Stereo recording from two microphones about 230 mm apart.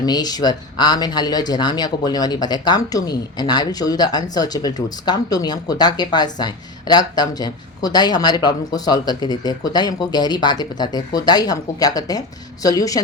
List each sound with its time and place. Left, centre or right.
0.0 s speech: centre